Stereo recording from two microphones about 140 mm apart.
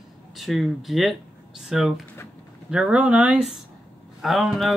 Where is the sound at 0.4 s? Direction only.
Centre (ahead or behind).